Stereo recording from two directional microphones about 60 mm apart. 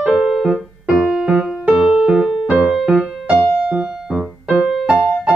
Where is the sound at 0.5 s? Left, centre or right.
Centre.